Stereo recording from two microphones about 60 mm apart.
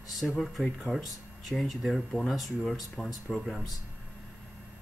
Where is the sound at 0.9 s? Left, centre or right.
Left.